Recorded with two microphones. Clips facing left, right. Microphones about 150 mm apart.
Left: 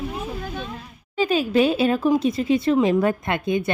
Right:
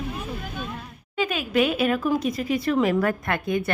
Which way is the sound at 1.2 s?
30° left (ahead or behind).